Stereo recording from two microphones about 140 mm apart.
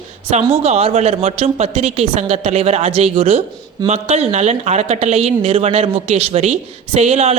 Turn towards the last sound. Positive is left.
turn(degrees=-50)  # may be behind; listen again after turning